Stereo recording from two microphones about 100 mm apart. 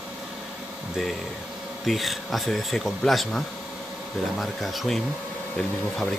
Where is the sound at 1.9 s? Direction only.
Centre (ahead or behind).